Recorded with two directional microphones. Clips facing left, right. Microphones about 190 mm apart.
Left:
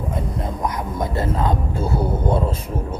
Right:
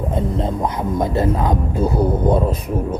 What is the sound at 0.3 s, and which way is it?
Speech, 25° right (ahead or behind).